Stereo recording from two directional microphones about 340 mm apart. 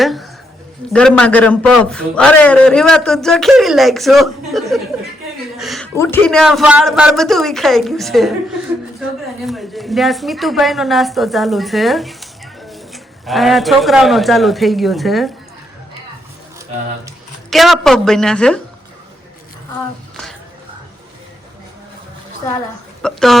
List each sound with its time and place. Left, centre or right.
0.0 s a man's voice: centre
9.4 s speech: centre
17.5 s a man's voice: centre
23.0 s a man's voice: centre